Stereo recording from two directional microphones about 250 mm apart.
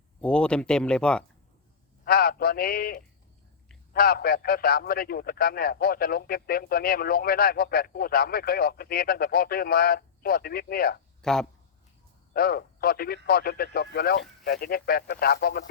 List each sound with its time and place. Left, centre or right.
0.2 s speech: centre
2.0 s a man's voice: left
11.2 s speech: centre
12.3 s speech: left